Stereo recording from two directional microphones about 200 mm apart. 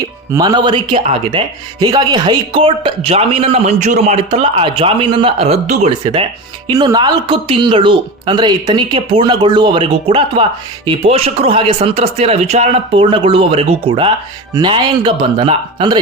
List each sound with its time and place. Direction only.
0.3 s speech: 20° right (ahead or behind)